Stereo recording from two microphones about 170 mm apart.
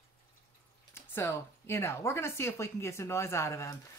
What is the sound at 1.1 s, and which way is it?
Speech, 15° left (ahead or behind).